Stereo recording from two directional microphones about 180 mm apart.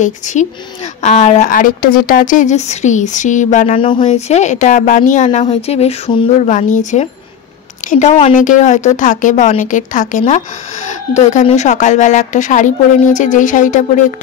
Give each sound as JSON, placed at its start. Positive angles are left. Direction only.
{"t": 0.0, "sound": "a woman's voice", "side_deg": 40}